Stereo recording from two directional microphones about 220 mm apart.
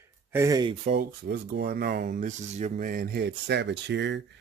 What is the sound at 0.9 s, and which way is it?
Speech, 45° right (ahead or behind).